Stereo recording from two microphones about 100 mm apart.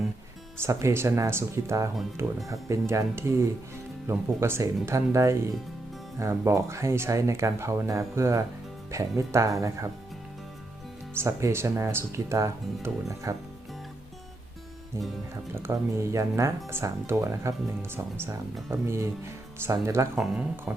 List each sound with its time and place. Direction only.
0.6 s speech: 30° right (ahead or behind)
11.1 s speech: 25° right (ahead or behind)
15.5 s speech: 25° right (ahead or behind)
20.1 s speech: 5° right (ahead or behind)